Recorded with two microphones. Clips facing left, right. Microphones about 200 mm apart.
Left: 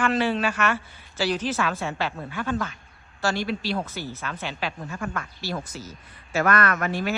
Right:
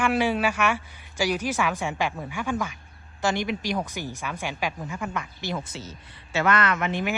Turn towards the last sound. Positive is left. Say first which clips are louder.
# even
turn(degrees=-20)  # may be behind; listen again after turning